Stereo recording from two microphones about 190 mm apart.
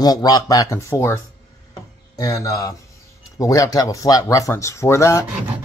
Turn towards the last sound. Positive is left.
turn(degrees=15)  # may be behind; listen again after turning